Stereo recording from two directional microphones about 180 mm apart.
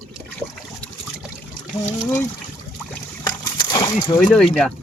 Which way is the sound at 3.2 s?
20° left (ahead or behind).